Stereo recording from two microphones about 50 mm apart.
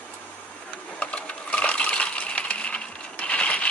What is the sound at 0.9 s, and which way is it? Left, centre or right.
Coin, left.